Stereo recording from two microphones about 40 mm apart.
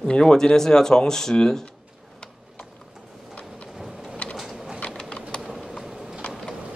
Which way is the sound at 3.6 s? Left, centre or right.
Centre.